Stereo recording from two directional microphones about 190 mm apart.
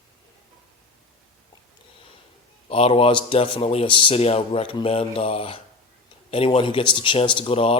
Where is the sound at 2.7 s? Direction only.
30° left (ahead or behind).